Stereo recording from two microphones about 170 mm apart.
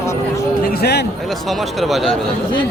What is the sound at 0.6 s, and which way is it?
Speech, 70° left (ahead or behind).